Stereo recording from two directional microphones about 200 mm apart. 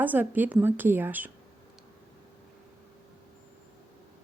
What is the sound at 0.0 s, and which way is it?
A woman's voice, 10° right (ahead or behind).